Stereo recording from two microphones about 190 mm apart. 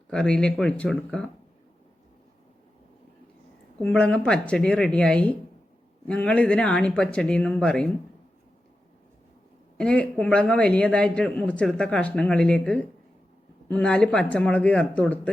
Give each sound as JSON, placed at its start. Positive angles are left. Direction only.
{"t": 0.1, "sound": "a man's voice", "side_deg": 5}
{"t": 3.8, "sound": "a man's voice", "side_deg": 5}
{"t": 9.7, "sound": "a man's voice", "side_deg": 5}